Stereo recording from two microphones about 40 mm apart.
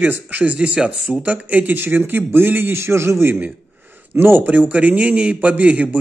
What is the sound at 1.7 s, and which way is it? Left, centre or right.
A man's voice, right.